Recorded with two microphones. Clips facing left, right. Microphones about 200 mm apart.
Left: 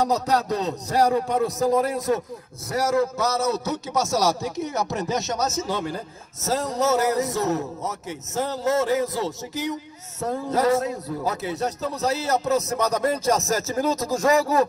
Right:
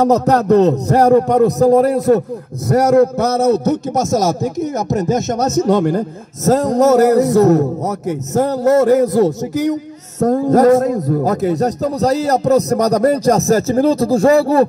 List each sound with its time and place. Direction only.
0.0 s music: 50° right (ahead or behind)
1.6 s speech: 40° right (ahead or behind)
2.7 s a man's voice: 60° right (ahead or behind)
6.8 s speech: 40° right (ahead or behind)
10.2 s music: 45° right (ahead or behind)
10.9 s speech: 45° right (ahead or behind)